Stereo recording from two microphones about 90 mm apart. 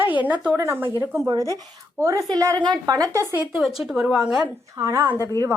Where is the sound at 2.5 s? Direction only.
50° right (ahead or behind).